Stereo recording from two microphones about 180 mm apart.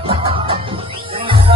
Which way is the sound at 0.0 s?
30° right (ahead or behind).